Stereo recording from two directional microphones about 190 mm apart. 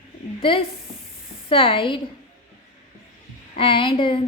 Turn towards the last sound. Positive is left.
turn(degrees=25)  # may be behind; listen again after turning